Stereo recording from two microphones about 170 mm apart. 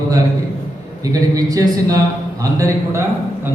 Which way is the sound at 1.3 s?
20° right (ahead or behind).